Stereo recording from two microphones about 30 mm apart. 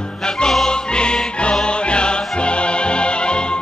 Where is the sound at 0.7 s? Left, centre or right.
Left.